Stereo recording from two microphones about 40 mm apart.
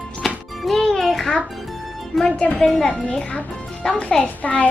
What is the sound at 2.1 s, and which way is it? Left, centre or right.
Speech, centre.